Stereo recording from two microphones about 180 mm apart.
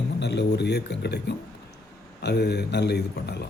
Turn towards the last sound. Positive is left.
turn(degrees=65)  # may be behind; listen again after turning